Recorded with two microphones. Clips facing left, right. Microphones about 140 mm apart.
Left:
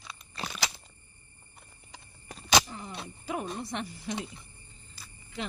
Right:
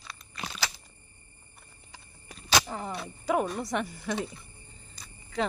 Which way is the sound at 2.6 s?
90° right.